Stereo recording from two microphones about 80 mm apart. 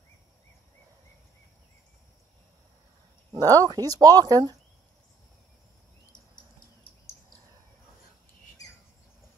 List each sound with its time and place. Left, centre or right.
3.4 s speech: right